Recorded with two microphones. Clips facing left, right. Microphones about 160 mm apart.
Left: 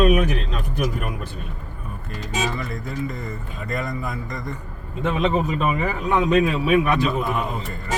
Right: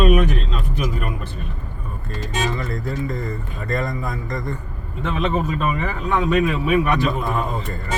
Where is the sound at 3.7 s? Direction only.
5° left (ahead or behind).